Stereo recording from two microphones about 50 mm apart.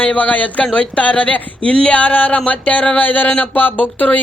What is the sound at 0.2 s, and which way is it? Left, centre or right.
Speech, left.